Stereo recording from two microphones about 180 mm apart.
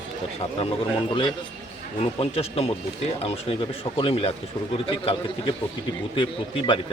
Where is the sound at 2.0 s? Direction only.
35° left (ahead or behind).